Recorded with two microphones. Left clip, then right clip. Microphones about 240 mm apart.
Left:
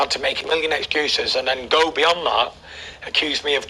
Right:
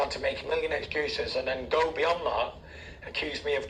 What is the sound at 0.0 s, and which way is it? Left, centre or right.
A man's voice, left.